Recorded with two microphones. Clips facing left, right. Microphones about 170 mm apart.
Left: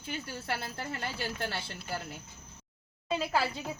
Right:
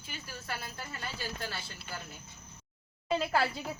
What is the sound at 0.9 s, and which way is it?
Speech, 65° left (ahead or behind).